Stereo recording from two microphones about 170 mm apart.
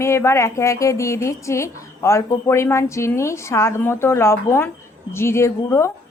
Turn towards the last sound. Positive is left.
turn(degrees=15)  # may be behind; listen again after turning